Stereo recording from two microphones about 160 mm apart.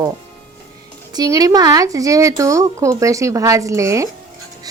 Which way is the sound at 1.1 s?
25° right (ahead or behind).